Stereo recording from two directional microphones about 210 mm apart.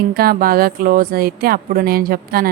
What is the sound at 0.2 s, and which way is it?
A woman's voice, 45° right (ahead or behind).